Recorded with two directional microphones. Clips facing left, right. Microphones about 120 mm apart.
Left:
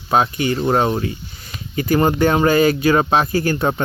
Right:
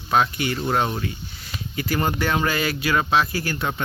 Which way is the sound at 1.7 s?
45° left (ahead or behind).